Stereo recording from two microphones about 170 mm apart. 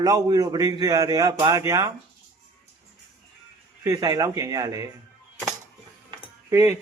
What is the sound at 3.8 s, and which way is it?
Speech, 20° right (ahead or behind).